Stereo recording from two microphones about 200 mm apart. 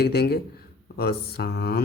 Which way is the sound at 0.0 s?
50° left (ahead or behind).